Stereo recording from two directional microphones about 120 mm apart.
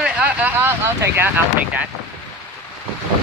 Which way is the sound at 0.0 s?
15° right (ahead or behind).